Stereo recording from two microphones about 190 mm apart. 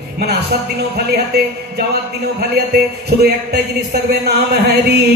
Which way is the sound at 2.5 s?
55° right (ahead or behind).